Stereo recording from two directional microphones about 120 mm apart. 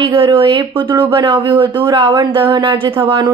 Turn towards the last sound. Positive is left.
turn(degrees=-45)  # may be behind; listen again after turning